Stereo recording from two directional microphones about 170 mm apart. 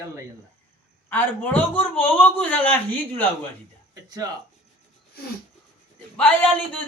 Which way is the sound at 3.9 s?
20° right (ahead or behind).